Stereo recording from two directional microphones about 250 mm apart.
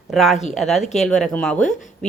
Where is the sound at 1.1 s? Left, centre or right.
Centre.